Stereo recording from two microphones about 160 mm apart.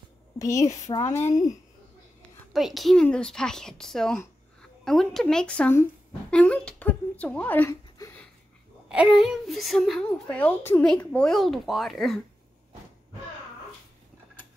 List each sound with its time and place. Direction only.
0.4 s a woman's voice: 20° left (ahead or behind)
2.5 s a woman's voice: centre (ahead or behind)
8.8 s a woman's voice: 5° right (ahead or behind)